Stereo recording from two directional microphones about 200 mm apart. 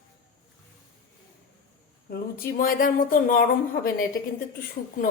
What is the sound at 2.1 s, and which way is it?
A woman's voice, 50° left (ahead or behind).